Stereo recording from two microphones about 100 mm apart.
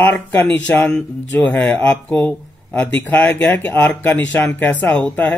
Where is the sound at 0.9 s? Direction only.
10° left (ahead or behind).